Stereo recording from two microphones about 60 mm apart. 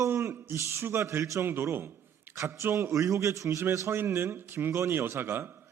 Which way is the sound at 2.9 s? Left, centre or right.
Right.